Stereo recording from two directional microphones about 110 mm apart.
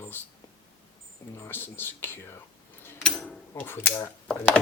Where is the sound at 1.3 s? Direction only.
20° left (ahead or behind).